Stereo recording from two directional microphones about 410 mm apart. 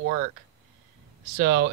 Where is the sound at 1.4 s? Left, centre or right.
Right.